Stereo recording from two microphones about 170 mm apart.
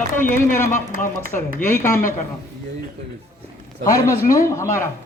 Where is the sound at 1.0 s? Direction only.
15° left (ahead or behind).